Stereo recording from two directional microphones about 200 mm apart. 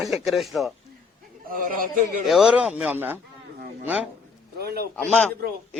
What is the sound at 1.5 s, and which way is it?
Speech, 45° right (ahead or behind).